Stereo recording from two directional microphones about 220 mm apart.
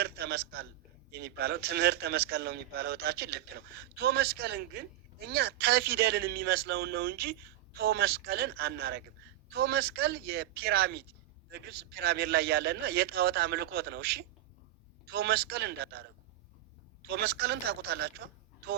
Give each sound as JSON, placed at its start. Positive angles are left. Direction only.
{"t": 0.0, "sound": "speech", "side_deg": -45}
{"t": 17.1, "sound": "speech", "side_deg": -45}